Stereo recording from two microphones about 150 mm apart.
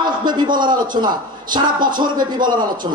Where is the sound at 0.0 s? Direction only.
30° right (ahead or behind).